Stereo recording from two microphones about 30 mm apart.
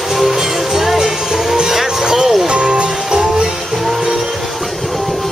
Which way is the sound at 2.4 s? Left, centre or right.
Right.